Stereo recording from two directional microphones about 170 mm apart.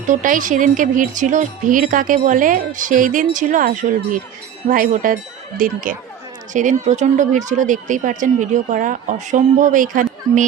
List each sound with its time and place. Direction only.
0.1 s speech: 50° right (ahead or behind)